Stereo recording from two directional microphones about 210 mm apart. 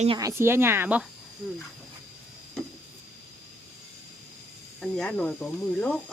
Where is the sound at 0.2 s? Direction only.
15° right (ahead or behind).